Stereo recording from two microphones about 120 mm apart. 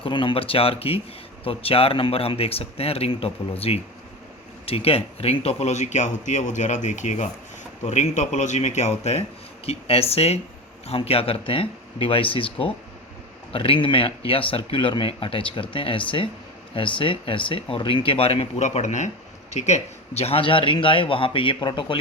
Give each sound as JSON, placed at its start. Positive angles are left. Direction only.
{"t": 0.0, "sound": "speech", "side_deg": 45}
{"t": 7.9, "sound": "speech", "side_deg": 70}